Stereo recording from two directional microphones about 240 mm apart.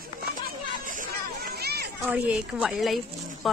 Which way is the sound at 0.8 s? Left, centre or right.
Right.